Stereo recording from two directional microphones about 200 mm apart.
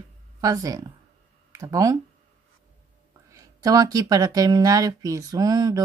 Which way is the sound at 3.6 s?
20° right (ahead or behind).